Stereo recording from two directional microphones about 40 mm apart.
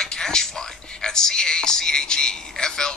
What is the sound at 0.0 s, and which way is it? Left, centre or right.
Music, centre.